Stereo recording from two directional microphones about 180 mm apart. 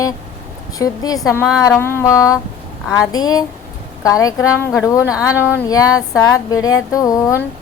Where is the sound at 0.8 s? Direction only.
20° left (ahead or behind).